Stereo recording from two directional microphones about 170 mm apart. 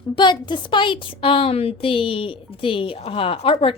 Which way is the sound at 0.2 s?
25° left (ahead or behind).